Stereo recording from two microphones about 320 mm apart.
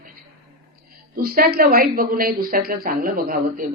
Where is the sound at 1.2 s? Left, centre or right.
Right.